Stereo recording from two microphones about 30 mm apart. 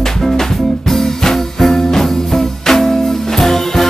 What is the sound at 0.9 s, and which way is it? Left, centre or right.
Music, centre.